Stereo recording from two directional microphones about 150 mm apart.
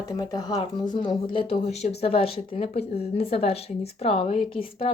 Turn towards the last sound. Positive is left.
turn(degrees=40)  # may be behind; listen again after turning